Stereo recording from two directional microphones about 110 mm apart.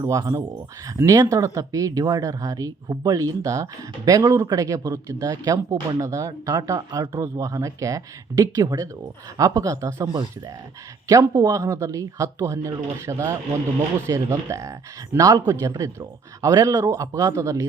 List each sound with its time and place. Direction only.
0.0 s a man's voice: 30° right (ahead or behind)
11.3 s a man's voice: 30° right (ahead or behind)